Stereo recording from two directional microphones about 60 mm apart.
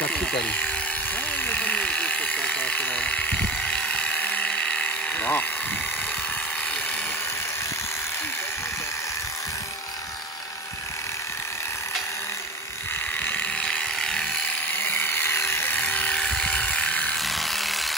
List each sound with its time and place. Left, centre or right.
0.0 s electric toothbrush: left
1.4 s electric shaver: left
13.2 s a sound: left; by 14.4 s centre
14.9 s a sound: left
15.8 s electric toothbrush: left
17.2 s electric toothbrush: centre